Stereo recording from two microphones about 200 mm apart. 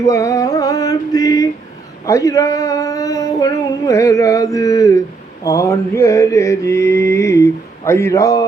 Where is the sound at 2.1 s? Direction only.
15° left (ahead or behind).